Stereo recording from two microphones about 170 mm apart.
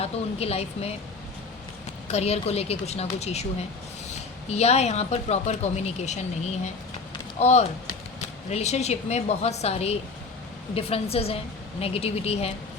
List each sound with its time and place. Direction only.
0.0 s speech: 35° left (ahead or behind)
2.0 s speech: 40° left (ahead or behind)
4.5 s speech: 40° left (ahead or behind)